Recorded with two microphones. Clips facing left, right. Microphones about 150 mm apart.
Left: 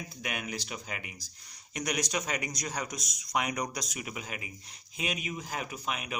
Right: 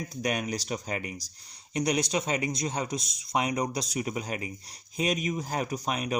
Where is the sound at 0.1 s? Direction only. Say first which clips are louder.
Right 9 dB; 40° right (ahead or behind).